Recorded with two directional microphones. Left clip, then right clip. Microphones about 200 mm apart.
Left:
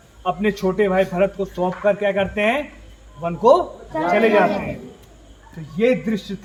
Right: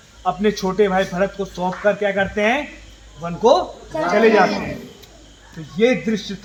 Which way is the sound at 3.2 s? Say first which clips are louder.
Left 1 dB; 35° left (ahead or behind).